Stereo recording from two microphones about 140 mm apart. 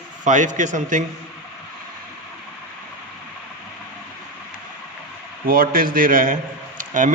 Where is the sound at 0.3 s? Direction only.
60° right (ahead or behind).